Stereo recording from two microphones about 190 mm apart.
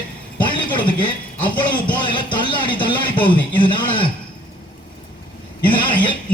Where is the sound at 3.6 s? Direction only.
25° left (ahead or behind).